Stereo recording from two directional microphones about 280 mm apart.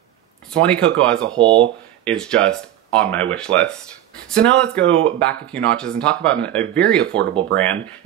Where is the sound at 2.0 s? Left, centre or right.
Centre.